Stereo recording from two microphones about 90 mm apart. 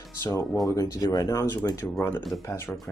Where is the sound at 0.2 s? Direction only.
30° left (ahead or behind).